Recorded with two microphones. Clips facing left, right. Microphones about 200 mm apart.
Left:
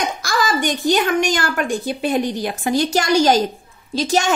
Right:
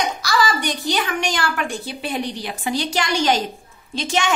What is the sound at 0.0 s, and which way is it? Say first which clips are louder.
A woman's voice: even; 50° left (ahead or behind).